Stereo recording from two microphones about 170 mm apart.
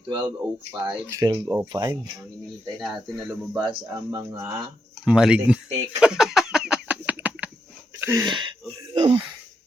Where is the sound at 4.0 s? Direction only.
25° right (ahead or behind).